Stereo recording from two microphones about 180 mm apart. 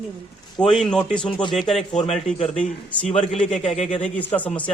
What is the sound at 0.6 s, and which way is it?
Speech, 5° left (ahead or behind).